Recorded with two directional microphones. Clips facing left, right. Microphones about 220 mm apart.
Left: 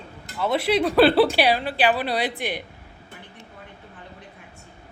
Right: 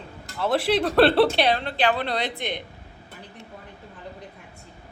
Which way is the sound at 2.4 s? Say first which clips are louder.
Left 2 dB; 20° right (ahead or behind).